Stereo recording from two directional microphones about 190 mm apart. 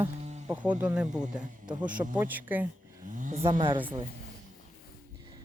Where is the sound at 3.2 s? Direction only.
40° right (ahead or behind).